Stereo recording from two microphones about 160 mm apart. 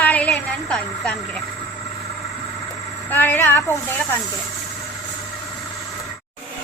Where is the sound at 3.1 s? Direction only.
10° left (ahead or behind).